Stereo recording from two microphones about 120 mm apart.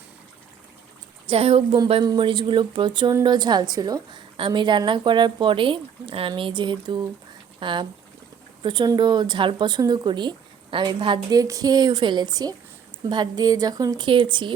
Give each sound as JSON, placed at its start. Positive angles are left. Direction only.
{"t": 1.3, "sound": "speech", "side_deg": -50}
{"t": 2.0, "sound": "speech", "side_deg": -40}